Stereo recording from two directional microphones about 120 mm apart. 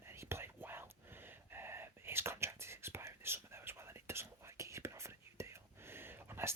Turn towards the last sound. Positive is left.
turn(degrees=-20)  # may be behind; listen again after turning